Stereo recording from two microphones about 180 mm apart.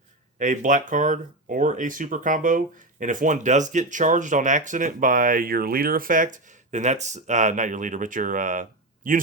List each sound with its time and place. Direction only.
0.3 s speech: 45° right (ahead or behind)